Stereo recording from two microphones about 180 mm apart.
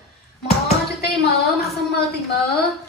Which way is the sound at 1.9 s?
60° left (ahead or behind).